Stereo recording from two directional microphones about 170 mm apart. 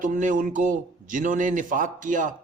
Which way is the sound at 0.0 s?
50° right (ahead or behind).